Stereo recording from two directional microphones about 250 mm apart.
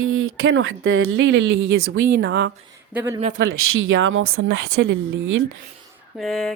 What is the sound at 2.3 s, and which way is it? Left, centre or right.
Speech, right.